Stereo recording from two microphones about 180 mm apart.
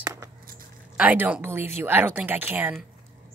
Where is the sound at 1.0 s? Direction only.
10° right (ahead or behind).